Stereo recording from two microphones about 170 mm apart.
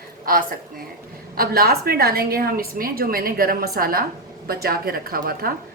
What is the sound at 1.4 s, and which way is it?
A woman's voice, 65° right (ahead or behind).